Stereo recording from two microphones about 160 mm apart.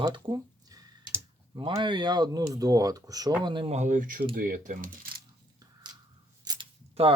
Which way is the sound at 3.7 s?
50° right (ahead or behind).